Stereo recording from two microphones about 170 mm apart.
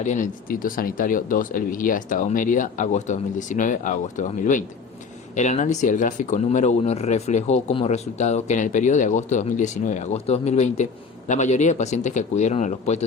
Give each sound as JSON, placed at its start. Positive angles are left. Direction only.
{"t": 0.0, "sound": "speech", "side_deg": 45}